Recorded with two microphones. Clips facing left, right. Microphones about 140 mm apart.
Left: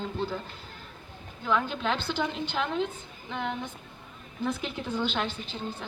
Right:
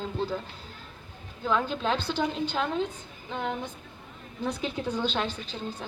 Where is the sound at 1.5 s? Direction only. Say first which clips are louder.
Right 1 dB; 35° right (ahead or behind).